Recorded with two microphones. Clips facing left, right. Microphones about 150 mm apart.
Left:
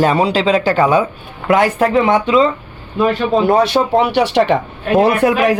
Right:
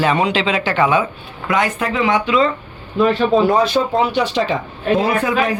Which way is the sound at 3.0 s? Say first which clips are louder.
Even; centre (ahead or behind).